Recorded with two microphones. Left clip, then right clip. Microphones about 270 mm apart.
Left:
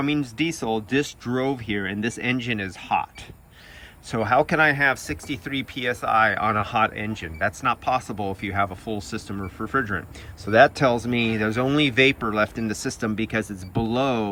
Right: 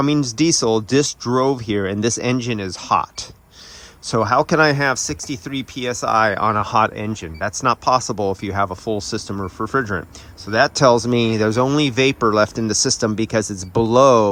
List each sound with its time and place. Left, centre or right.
0.0 s speech: centre